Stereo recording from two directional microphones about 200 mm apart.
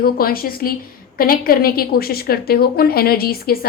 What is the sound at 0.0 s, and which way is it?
A woman's voice, 50° left (ahead or behind).